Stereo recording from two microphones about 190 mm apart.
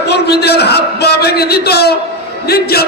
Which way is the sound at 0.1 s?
60° left (ahead or behind).